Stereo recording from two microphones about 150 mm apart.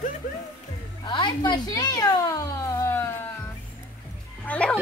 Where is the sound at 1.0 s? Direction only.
30° left (ahead or behind).